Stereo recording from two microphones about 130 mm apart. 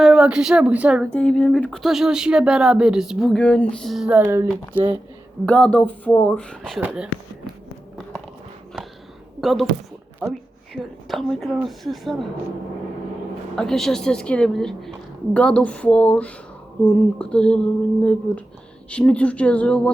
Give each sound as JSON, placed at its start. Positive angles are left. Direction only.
{"t": 0.0, "sound": "speech", "side_deg": -5}
{"t": 1.1, "sound": "speech", "side_deg": 10}
{"t": 3.3, "sound": "a woman's voice", "side_deg": 10}
{"t": 4.2, "sound": "speech", "side_deg": -20}
{"t": 5.5, "sound": "a woman's voice", "side_deg": 10}
{"t": 9.4, "sound": "speech", "side_deg": 0}
{"t": 13.6, "sound": "a woman's voice", "side_deg": 5}